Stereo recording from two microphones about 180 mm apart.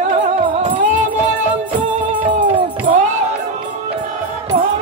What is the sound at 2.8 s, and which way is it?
Music, 45° right (ahead or behind).